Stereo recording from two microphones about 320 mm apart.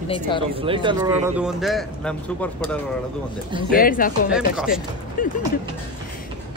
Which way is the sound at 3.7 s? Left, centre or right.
Left.